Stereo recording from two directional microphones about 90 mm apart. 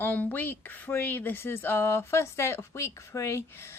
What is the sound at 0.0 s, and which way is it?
A woman's voice, 20° left (ahead or behind).